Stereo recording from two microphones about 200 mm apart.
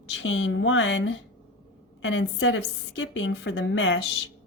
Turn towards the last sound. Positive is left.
turn(degrees=70)  # may be behind; listen again after turning